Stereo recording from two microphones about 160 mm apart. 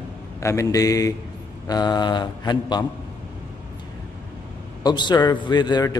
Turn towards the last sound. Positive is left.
turn(degrees=25)  # may be behind; listen again after turning